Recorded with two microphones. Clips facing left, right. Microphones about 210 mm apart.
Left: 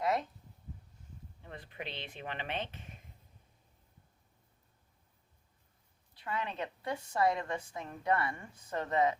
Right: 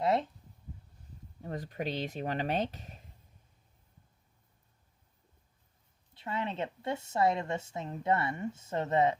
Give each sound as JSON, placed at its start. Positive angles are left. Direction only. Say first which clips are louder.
{"t": 0.0, "sound": "a sound", "louder": "right 4 dB", "side_deg": -30}
{"t": 1.4, "sound": "speech", "louder": "right 9 dB", "side_deg": -40}
{"t": 6.1, "sound": "a woman's voice", "louder": "right 3 dB", "side_deg": -25}